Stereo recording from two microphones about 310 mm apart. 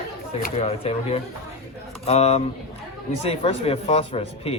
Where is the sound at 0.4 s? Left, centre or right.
Left.